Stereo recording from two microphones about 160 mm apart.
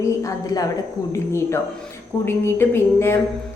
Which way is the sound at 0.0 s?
20° left (ahead or behind).